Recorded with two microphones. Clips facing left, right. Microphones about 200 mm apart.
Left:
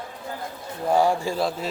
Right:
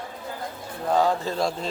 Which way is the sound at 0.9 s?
10° left (ahead or behind).